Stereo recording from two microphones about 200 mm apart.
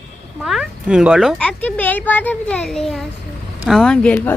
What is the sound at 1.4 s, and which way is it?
A child's voice, 5° left (ahead or behind).